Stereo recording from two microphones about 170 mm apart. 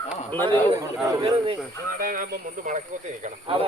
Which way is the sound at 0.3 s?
15° left (ahead or behind).